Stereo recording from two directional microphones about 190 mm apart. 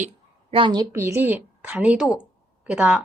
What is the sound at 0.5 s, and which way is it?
A woman's voice, 25° right (ahead or behind).